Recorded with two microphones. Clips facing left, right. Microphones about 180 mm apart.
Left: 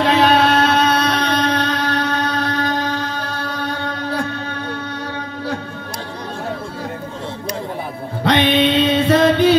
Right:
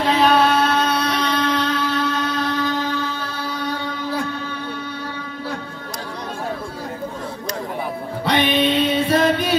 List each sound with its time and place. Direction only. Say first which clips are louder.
0.0 s music: left 2 dB; 70° left (ahead or behind)
8.2 s music: left 4 dB; 75° left (ahead or behind)